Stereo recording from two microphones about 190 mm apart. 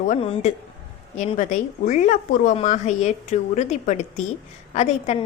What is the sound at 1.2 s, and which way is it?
A woman's voice, 40° left (ahead or behind).